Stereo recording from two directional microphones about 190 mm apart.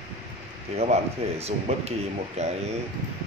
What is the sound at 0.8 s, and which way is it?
Speech, 35° right (ahead or behind).